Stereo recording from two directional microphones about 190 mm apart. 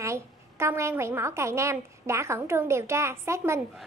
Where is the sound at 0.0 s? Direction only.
15° right (ahead or behind).